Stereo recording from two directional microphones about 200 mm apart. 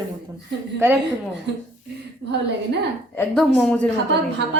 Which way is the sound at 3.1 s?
10° left (ahead or behind).